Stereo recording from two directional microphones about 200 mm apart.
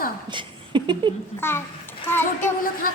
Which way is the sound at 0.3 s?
25° right (ahead or behind).